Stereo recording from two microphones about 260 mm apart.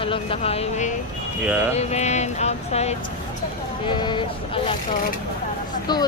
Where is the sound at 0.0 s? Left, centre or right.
Left.